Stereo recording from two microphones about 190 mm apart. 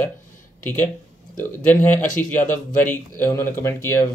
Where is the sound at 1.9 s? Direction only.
45° left (ahead or behind).